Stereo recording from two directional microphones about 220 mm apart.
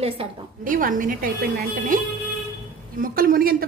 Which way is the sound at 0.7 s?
40° right (ahead or behind).